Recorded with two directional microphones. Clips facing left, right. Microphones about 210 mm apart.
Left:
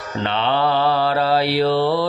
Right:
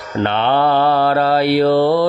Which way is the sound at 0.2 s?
55° right (ahead or behind).